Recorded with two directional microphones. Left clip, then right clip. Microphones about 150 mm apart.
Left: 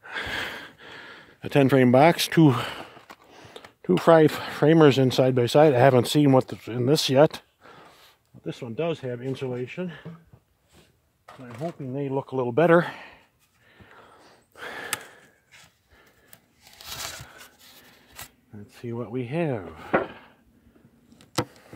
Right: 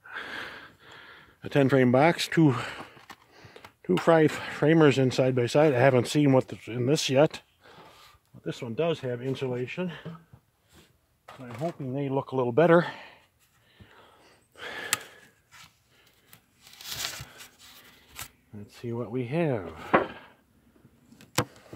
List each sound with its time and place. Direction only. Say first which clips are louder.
0.0 s gasp: left 7 dB; 55° left (ahead or behind)
3.3 s speech: left 4 dB; 50° left (ahead or behind)
11.2 s speech: even; 25° left (ahead or behind); by 13.2 s 40° left (ahead or behind)
13.7 s a sound: left 4 dB; 40° left (ahead or behind)
16.9 s a sound: right 1 dB; centre (ahead or behind)
18.2 s shuffling cards: right 1 dB; 5° left (ahead or behind)
18.7 s speech: left 1 dB; 30° left (ahead or behind)
21.5 s vehicle: left 1 dB; 25° left (ahead or behind)